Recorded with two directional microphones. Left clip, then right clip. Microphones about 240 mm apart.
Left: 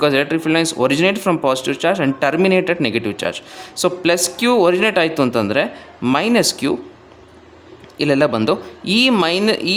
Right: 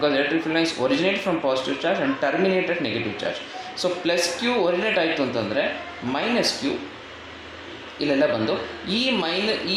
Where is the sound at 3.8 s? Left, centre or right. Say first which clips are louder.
Left 6 dB; left.